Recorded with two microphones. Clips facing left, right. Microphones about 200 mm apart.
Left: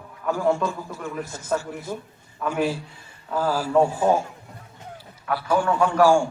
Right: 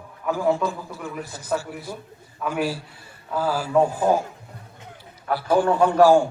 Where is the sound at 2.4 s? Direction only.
5° right (ahead or behind).